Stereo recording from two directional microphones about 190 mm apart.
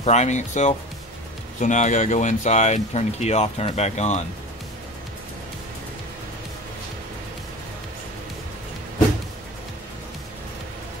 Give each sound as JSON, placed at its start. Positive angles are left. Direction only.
{"t": 0.0, "sound": "speech", "side_deg": 35}